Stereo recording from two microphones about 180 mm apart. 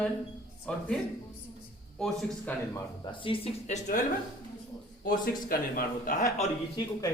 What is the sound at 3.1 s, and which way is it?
Speech, 30° left (ahead or behind).